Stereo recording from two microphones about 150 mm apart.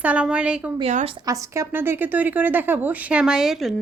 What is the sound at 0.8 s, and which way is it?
Speech, 40° right (ahead or behind).